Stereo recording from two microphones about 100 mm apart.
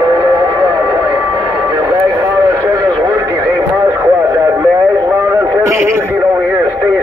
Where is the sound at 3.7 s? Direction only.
20° right (ahead or behind).